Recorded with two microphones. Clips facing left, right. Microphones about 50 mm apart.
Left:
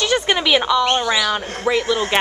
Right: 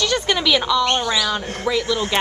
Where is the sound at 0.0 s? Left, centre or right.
Centre.